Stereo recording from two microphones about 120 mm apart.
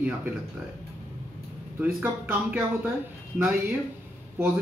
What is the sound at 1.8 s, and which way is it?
Speech, 10° right (ahead or behind).